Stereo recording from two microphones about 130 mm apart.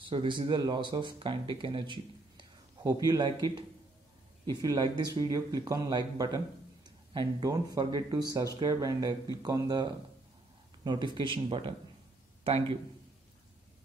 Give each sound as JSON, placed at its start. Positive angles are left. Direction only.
{"t": 0.1, "sound": "a man's voice", "side_deg": -40}